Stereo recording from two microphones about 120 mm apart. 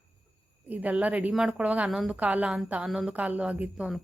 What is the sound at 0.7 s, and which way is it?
A woman's voice, 15° right (ahead or behind).